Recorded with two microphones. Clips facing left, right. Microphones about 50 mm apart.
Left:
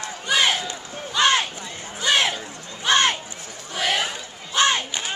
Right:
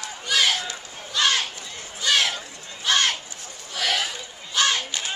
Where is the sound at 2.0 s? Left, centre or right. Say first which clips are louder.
Left 2 dB; left.